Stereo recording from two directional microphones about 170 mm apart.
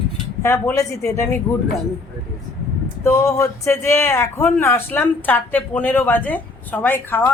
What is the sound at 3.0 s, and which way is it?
Speech, 15° left (ahead or behind).